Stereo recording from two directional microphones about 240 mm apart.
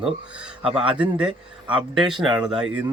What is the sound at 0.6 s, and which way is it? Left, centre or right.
Speech, right.